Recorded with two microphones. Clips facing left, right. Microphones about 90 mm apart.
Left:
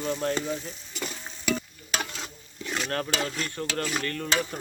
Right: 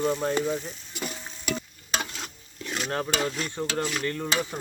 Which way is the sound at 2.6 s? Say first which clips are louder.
Left 1 dB; centre (ahead or behind).